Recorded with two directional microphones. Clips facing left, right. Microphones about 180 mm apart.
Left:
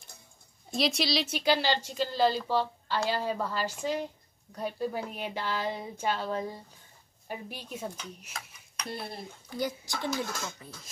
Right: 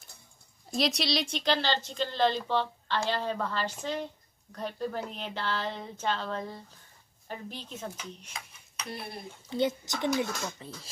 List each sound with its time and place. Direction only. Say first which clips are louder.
0.7 s speech: even; centre (ahead or behind)
9.5 s a child's voice: right 4 dB; 25° right (ahead or behind)